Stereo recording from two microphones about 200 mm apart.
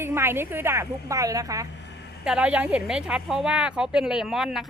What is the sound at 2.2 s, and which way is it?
A woman's voice, 5° right (ahead or behind).